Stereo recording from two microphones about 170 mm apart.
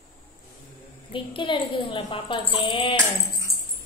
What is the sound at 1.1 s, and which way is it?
A woman's voice, 30° left (ahead or behind).